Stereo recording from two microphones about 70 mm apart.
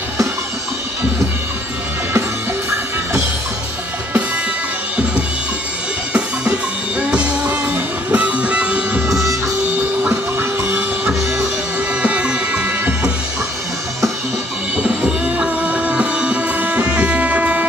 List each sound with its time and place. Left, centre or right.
7.0 s music: centre
12.0 s music: centre
14.8 s music: centre